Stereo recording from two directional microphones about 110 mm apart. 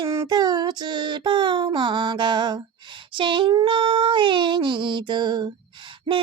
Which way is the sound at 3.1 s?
50° right (ahead or behind).